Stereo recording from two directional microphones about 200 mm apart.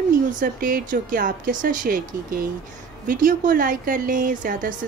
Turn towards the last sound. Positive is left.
turn(degrees=-45)  # may be behind; listen again after turning